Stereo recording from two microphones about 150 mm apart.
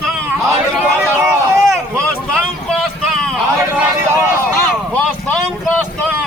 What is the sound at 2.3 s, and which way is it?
Vehicle, centre (ahead or behind).